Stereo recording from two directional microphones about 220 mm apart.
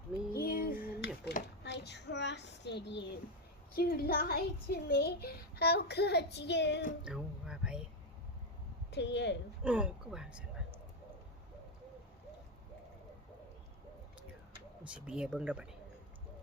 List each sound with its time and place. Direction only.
0.3 s a sound: 45° left (ahead or behind)
3.8 s a woman's voice: 40° left (ahead or behind)
7.0 s music: 5° right (ahead or behind)
8.9 s a woman's voice: 50° left (ahead or behind)
9.6 s speech: 5° right (ahead or behind)
14.8 s speech: 5° right (ahead or behind)